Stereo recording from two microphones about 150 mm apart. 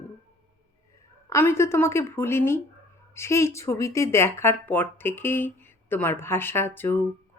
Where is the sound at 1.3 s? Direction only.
15° left (ahead or behind).